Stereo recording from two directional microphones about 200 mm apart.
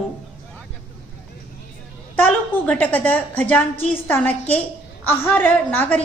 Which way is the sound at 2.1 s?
10° left (ahead or behind).